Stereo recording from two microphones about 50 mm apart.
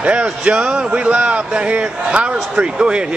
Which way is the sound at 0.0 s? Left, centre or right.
Right.